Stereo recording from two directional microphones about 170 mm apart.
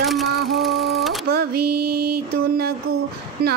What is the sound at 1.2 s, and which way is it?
Music, 65° right (ahead or behind).